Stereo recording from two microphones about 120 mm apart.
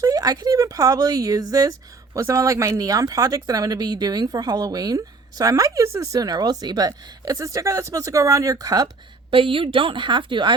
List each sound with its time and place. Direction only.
0.0 s a woman's voice: 30° right (ahead or behind)
9.3 s a woman's voice: 45° right (ahead or behind)